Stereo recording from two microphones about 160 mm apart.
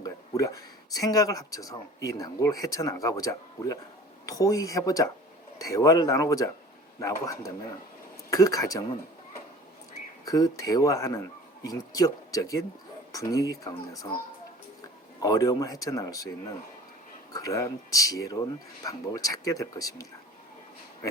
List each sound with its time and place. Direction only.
0.0 s speech: 20° left (ahead or behind)
10.2 s speech: 25° left (ahead or behind)
15.2 s speech: 20° left (ahead or behind)
17.3 s speech: 20° left (ahead or behind)